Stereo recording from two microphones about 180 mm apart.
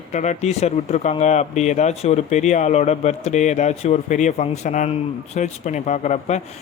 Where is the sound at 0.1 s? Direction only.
40° left (ahead or behind).